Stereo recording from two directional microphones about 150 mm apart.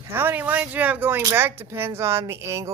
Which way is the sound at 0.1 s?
15° right (ahead or behind).